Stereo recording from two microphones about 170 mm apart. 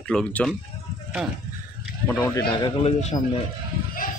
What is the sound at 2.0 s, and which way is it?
Speech, 15° left (ahead or behind).